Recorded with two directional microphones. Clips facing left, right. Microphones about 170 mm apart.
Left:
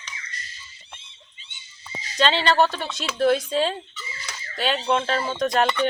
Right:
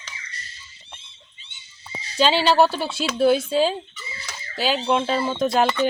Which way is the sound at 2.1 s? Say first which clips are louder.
Right 3 dB; 5° right (ahead or behind).